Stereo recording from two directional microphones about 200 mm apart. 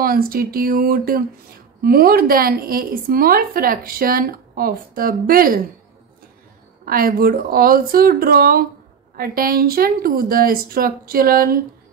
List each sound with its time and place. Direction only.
0.0 s a woman's voice: 45° right (ahead or behind)
6.8 s a woman's voice: 45° right (ahead or behind)